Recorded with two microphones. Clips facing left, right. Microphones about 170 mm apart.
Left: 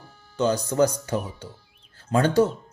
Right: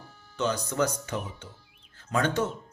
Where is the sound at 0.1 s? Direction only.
35° left (ahead or behind).